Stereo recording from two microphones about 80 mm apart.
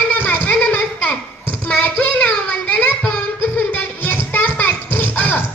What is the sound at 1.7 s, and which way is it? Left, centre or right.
Child singing, centre.